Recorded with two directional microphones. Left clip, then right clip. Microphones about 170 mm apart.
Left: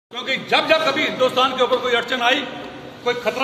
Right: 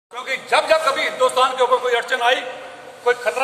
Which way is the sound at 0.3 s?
15° right (ahead or behind).